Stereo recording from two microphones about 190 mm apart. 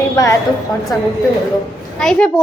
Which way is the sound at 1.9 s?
5° left (ahead or behind).